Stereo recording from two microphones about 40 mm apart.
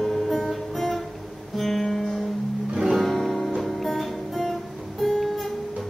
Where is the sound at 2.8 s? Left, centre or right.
Centre.